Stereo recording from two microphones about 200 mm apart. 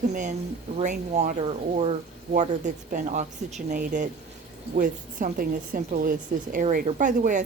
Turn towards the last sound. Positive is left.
turn(degrees=-40)  # may be behind; listen again after turning